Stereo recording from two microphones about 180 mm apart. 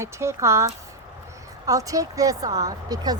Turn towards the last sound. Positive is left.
turn(degrees=-20)  # may be behind; listen again after turning